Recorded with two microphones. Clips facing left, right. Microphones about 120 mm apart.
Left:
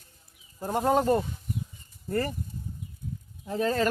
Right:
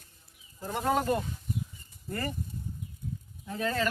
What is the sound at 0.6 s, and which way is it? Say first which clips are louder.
Speech: left 4 dB; 40° left (ahead or behind).